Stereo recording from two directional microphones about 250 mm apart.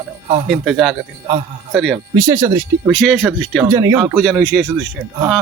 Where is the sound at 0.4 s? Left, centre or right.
Centre.